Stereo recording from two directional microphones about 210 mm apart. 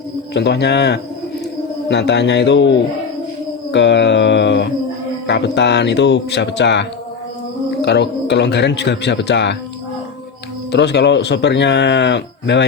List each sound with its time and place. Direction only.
0.3 s speech: 55° left (ahead or behind)
3.7 s a sound: 55° left (ahead or behind)
5.2 s speech: 55° left (ahead or behind)
10.7 s speech: 55° left (ahead or behind)